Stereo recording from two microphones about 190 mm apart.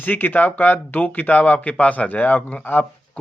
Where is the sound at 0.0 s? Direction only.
10° left (ahead or behind).